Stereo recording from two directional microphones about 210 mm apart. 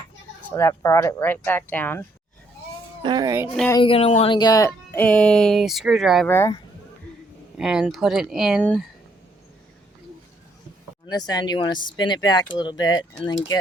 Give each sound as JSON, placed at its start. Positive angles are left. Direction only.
{"t": 0.5, "sound": "speech", "side_deg": 10}
{"t": 3.0, "sound": "speech", "side_deg": -20}
{"t": 3.7, "sound": "speech", "side_deg": 25}
{"t": 6.3, "sound": "speech", "side_deg": 15}
{"t": 7.5, "sound": "speech", "side_deg": -5}
{"t": 11.0, "sound": "speech", "side_deg": 20}